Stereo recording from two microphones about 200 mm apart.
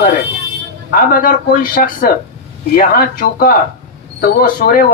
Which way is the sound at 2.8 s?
45° left (ahead or behind).